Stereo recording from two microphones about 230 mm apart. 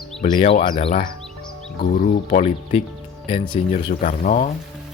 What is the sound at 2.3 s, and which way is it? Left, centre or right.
Speech, left.